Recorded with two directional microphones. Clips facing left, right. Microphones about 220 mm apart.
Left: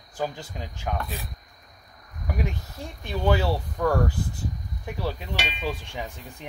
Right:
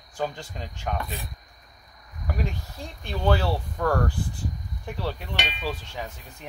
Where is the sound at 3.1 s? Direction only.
10° left (ahead or behind).